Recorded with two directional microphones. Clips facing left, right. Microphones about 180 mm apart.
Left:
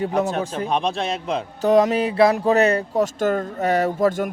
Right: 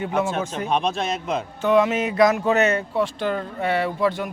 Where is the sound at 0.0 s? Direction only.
40° left (ahead or behind).